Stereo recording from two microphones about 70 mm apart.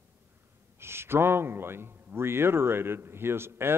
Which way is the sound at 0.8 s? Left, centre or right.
Right.